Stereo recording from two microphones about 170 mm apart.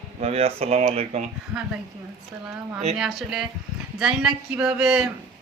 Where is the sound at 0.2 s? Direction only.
35° right (ahead or behind).